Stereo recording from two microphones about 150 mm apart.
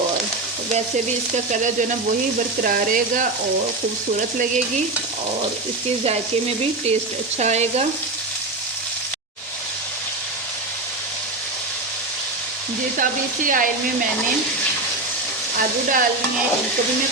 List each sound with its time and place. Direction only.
2.6 s frying: 65° right (ahead or behind)
7.3 s frying: 50° right (ahead or behind)
13.0 s sizzle: 65° right (ahead or behind)
15.5 s frying: 65° right (ahead or behind)